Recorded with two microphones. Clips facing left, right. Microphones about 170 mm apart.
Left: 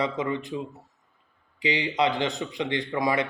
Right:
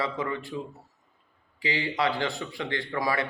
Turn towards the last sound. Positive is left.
turn(degrees=20)  # may be behind; listen again after turning